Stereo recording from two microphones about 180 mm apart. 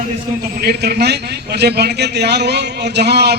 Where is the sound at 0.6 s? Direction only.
65° right (ahead or behind).